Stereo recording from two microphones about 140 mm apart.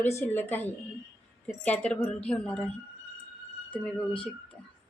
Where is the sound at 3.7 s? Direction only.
10° left (ahead or behind).